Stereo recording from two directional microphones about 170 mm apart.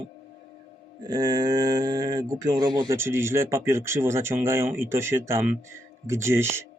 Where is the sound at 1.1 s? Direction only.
25° right (ahead or behind).